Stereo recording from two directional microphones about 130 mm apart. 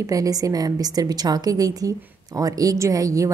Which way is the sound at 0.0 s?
25° right (ahead or behind).